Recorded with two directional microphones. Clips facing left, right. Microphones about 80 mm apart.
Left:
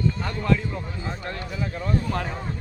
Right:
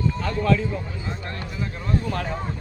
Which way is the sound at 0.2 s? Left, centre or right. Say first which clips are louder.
Right 2 dB; centre.